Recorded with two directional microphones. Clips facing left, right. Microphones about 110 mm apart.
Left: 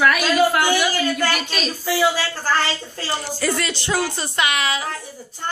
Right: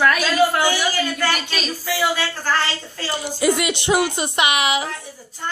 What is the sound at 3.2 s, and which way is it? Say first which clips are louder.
Speech: right 6 dB; 15° right (ahead or behind).